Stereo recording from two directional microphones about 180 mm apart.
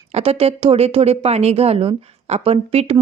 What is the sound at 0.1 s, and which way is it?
A woman's voice, 35° right (ahead or behind).